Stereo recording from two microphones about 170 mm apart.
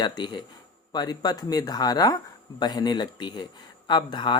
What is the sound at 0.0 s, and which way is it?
Speech, 25° left (ahead or behind).